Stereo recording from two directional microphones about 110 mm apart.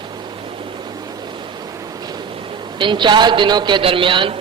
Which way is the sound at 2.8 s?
45° right (ahead or behind).